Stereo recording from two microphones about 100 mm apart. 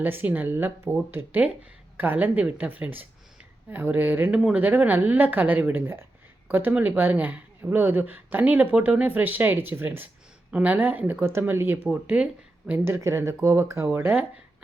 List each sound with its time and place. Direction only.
0.0 s speech: 20° right (ahead or behind)
13.0 s speech: 30° right (ahead or behind)
13.9 s speech: 20° right (ahead or behind)